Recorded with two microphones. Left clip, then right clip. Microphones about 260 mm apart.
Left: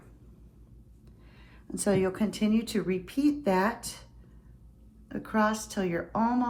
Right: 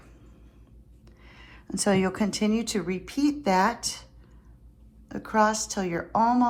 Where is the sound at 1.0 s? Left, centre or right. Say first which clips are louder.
Right 8 dB; right.